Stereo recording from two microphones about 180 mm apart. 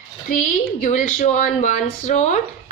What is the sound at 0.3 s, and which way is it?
Speech, 45° left (ahead or behind).